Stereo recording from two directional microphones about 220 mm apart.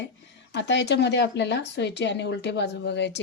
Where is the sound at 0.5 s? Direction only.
50° left (ahead or behind).